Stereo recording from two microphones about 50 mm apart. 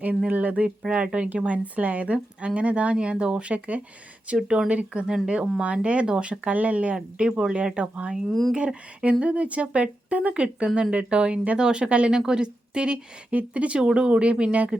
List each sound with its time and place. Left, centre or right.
0.3 s speech: right
4.4 s speech: centre; by 6.9 s right
6.9 s speech: centre
8.3 s speech: centre
8.5 s speech: right